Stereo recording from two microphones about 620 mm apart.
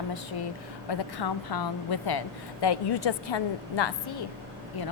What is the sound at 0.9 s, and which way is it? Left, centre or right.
A woman's voice, left.